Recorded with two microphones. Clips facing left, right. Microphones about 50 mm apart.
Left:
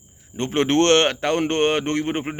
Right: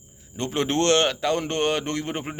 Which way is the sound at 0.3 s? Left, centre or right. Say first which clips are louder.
Left 5 dB; left.